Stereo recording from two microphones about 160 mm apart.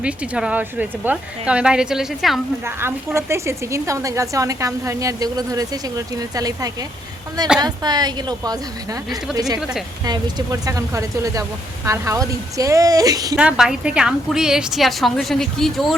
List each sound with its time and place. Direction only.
0.0 s a woman's voice: 5° right (ahead or behind)
2.6 s a woman's voice: 15° right (ahead or behind)
13.3 s a woman's voice: 5° right (ahead or behind)